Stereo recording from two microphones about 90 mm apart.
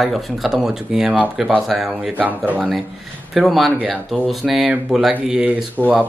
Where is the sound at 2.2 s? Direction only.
20° right (ahead or behind).